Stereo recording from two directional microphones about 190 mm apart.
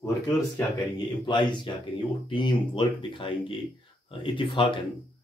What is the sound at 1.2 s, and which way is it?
Speech, 25° left (ahead or behind).